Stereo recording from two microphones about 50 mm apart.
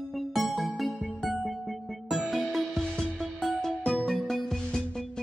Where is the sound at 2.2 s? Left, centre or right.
Centre.